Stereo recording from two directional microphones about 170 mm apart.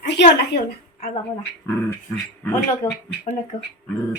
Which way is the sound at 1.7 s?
10° left (ahead or behind).